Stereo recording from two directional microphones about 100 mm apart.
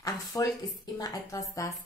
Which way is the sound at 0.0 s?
40° left (ahead or behind).